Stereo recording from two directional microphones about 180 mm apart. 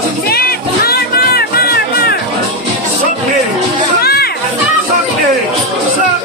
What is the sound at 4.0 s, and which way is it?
Music, 60° left (ahead or behind).